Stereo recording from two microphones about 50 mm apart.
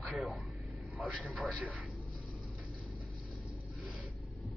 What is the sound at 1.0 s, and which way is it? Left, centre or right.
Vehicle, right.